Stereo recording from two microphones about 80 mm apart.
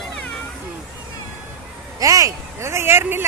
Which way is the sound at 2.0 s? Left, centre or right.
Right.